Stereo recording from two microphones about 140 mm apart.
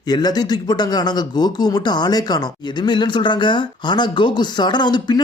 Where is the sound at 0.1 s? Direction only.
30° left (ahead or behind).